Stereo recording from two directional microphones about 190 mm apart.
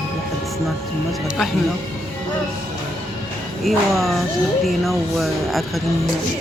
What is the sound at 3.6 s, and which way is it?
Speech, centre (ahead or behind).